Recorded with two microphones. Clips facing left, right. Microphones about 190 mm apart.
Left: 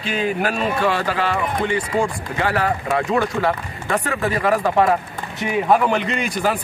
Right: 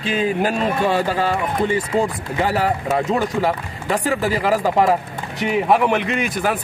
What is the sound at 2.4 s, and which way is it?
A man's voice, 20° right (ahead or behind).